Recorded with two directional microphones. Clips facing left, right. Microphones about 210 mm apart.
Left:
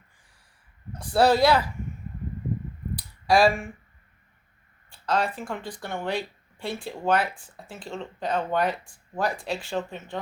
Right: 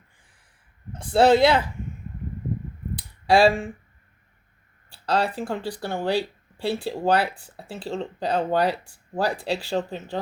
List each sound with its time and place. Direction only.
0.9 s speech: 25° right (ahead or behind)
2.9 s a sound: 30° right (ahead or behind)
4.9 s speech: 35° right (ahead or behind)